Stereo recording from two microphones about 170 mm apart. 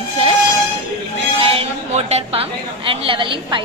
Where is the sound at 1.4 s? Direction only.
35° right (ahead or behind).